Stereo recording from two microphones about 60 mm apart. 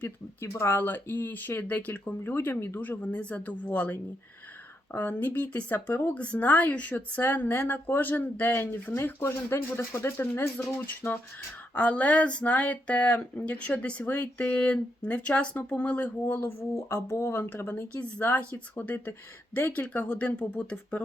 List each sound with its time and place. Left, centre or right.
0.3 s speech: left
3.0 s speech: left
6.1 s speech: left
7.2 s speech: left
11.7 s speech: left
16.2 s speech: left
17.9 s speech: left